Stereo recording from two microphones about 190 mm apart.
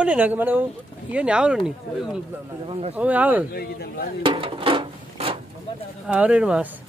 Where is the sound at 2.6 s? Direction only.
30° right (ahead or behind).